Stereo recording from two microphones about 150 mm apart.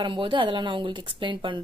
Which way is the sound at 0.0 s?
30° right (ahead or behind).